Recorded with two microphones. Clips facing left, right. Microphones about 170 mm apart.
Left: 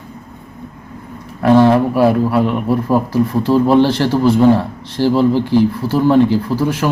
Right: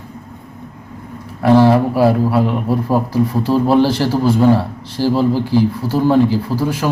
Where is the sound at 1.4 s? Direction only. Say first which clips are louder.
Left 1 dB; 10° right (ahead or behind).